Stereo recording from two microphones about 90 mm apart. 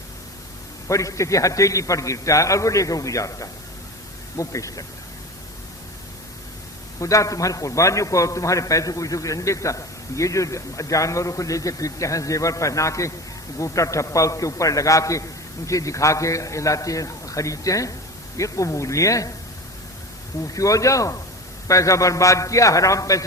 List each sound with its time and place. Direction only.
0.9 s a man's voice: 35° left (ahead or behind)
7.0 s a man's voice: 35° left (ahead or behind)
20.5 s a man's voice: 40° left (ahead or behind)